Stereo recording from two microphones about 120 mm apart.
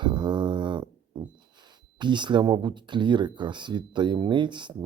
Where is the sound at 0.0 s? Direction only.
40° right (ahead or behind).